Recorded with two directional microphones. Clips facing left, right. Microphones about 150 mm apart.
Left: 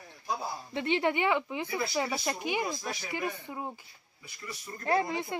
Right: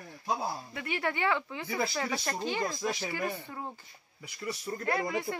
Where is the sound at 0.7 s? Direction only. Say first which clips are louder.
Left 5 dB; 25° left (ahead or behind).